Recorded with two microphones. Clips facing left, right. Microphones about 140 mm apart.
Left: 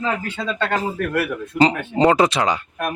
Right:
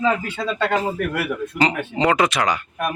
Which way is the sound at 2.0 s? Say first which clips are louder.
Left 3 dB; 30° left (ahead or behind).